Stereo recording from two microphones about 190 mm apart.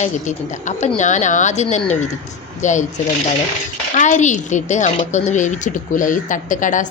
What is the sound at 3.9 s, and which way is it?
Speech, 40° left (ahead or behind).